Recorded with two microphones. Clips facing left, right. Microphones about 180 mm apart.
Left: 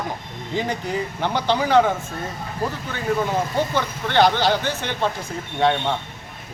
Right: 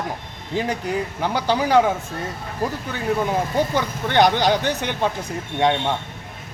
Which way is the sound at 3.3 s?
15° right (ahead or behind).